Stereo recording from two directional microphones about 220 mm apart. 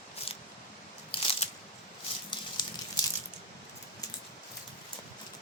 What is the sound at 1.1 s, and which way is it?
Crunch, 25° left (ahead or behind).